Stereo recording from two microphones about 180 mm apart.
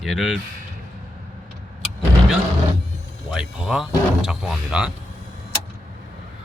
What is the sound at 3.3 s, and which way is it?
Speech, 5° right (ahead or behind).